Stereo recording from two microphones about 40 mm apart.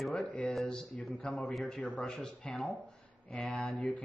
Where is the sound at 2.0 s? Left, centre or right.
Centre.